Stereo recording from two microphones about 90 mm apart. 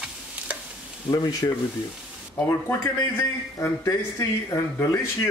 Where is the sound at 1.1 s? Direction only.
50° left (ahead or behind).